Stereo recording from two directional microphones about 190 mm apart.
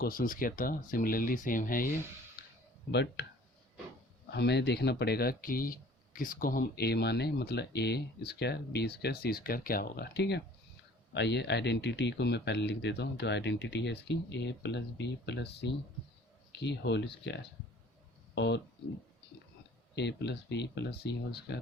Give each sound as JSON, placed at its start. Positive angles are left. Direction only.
{"t": 0.0, "sound": "speech", "side_deg": 50}
{"t": 2.9, "sound": "speech", "side_deg": 65}
{"t": 4.3, "sound": "speech", "side_deg": 60}
{"t": 20.0, "sound": "speech", "side_deg": 65}